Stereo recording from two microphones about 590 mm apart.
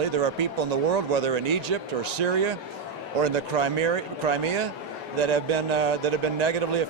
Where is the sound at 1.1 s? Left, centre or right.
Right.